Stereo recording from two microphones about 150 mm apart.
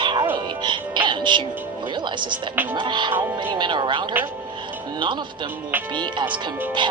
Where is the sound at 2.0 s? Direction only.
30° right (ahead or behind).